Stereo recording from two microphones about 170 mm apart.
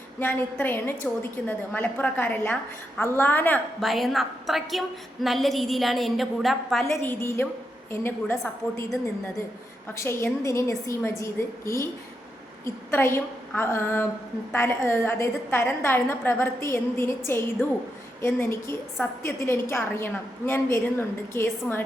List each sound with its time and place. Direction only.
0.2 s a woman's voice: 10° left (ahead or behind)
3.8 s a woman's voice: centre (ahead or behind)
6.8 s a woman's voice: 15° left (ahead or behind)
9.9 s a woman's voice: 15° left (ahead or behind)